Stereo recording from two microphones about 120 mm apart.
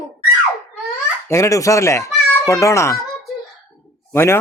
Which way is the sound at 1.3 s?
25° left (ahead or behind).